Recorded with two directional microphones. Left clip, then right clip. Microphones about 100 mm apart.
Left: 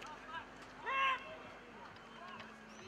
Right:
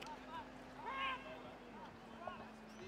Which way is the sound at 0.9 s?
30° right (ahead or behind).